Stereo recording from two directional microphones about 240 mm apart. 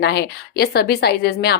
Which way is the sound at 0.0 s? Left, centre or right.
Left.